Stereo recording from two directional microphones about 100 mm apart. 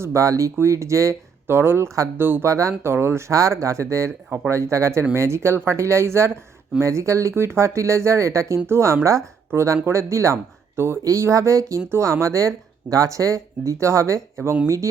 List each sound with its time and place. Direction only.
0.0 s speech: 30° right (ahead or behind)